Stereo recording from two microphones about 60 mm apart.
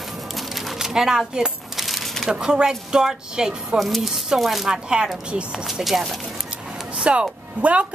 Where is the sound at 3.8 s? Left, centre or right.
Centre.